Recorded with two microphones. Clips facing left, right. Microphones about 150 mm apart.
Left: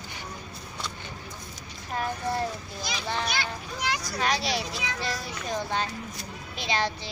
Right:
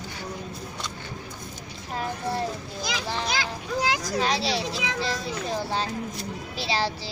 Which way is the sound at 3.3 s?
90° right.